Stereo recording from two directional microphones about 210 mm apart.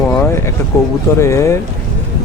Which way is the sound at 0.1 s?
15° left (ahead or behind).